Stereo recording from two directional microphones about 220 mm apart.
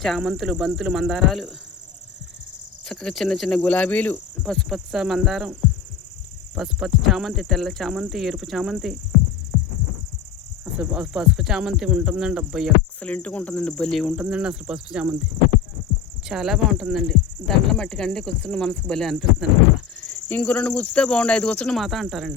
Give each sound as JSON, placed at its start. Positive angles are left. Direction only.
{"t": 0.0, "sound": "speech", "side_deg": 0}
{"t": 2.8, "sound": "speech", "side_deg": 0}
{"t": 6.6, "sound": "speech", "side_deg": 0}
{"t": 10.8, "sound": "speech", "side_deg": -5}
{"t": 16.2, "sound": "speech", "side_deg": 0}